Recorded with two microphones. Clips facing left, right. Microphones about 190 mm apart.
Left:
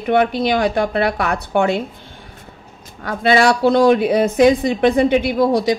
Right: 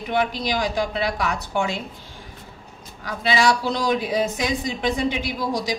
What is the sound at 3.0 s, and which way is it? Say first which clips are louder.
A woman's voice: left 6 dB; 60° left (ahead or behind).